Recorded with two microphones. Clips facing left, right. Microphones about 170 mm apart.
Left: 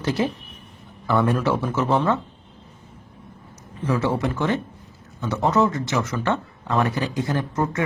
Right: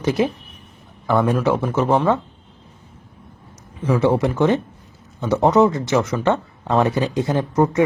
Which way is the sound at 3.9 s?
20° right (ahead or behind).